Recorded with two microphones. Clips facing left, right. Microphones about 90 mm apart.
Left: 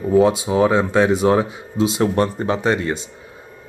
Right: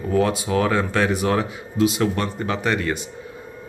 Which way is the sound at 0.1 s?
20° left (ahead or behind).